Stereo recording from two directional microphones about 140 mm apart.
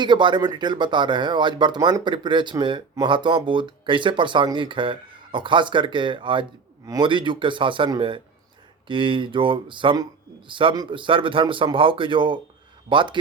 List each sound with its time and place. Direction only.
0.0 s speech: 35° right (ahead or behind)